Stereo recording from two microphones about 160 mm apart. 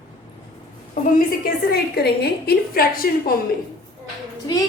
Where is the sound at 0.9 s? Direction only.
65° left (ahead or behind).